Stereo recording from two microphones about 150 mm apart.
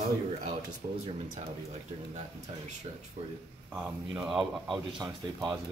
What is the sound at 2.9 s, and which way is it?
Speech, 40° right (ahead or behind).